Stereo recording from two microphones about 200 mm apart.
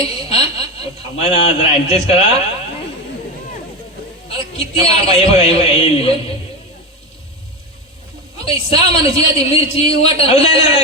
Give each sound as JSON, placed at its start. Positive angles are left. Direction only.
{"t": 0.3, "sound": "speech", "side_deg": 30}
{"t": 4.5, "sound": "speech", "side_deg": 30}
{"t": 8.4, "sound": "a woman's voice", "side_deg": 30}